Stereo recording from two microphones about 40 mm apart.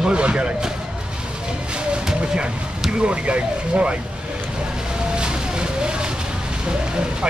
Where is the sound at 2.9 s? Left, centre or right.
Right.